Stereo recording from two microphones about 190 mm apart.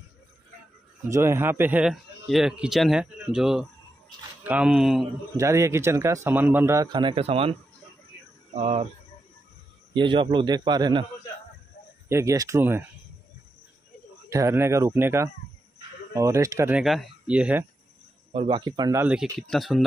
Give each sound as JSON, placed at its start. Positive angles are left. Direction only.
{"t": 1.0, "sound": "a man's voice", "side_deg": -15}
{"t": 5.4, "sound": "a man's voice", "side_deg": -15}
{"t": 8.5, "sound": "speech", "side_deg": -35}
{"t": 9.9, "sound": "a man's voice", "side_deg": -25}
{"t": 12.1, "sound": "a man's voice", "side_deg": -15}
{"t": 14.3, "sound": "a man's voice", "side_deg": -15}
{"t": 18.3, "sound": "a man's voice", "side_deg": -25}
{"t": 19.4, "sound": "a man's voice", "side_deg": 0}